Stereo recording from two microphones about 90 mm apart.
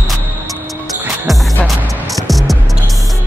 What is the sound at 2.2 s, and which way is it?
Music, centre (ahead or behind).